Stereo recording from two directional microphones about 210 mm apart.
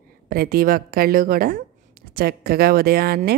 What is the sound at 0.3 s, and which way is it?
A woman's voice, 45° right (ahead or behind).